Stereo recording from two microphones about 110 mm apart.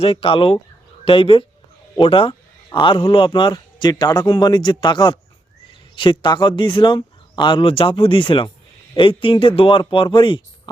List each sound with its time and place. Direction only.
0.0 s a man's voice: 55° left (ahead or behind)